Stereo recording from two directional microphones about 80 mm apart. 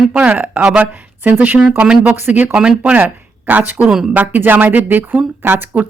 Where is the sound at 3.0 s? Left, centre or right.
Right.